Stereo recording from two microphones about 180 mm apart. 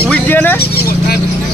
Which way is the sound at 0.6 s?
60° left (ahead or behind).